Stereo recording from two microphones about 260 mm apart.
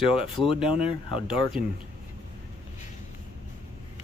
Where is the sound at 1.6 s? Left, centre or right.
Centre.